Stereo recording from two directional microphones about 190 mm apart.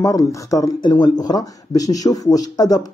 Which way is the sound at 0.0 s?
15° left (ahead or behind).